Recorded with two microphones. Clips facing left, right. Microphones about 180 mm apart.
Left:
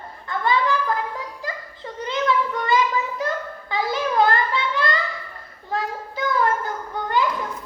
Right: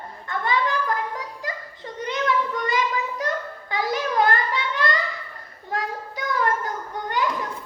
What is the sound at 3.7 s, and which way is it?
Child singing, 25° left (ahead or behind).